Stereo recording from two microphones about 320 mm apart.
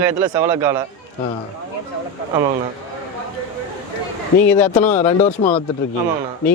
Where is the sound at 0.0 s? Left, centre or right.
Centre.